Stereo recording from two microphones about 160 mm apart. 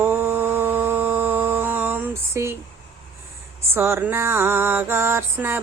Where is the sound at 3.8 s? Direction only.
15° right (ahead or behind).